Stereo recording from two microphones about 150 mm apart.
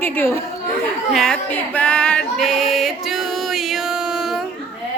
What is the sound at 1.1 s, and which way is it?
Female singing, centre (ahead or behind).